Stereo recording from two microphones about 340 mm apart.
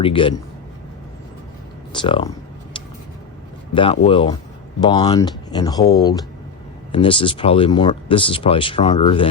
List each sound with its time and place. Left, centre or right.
0.0 s speech: centre
1.9 s speech: centre
3.8 s speech: centre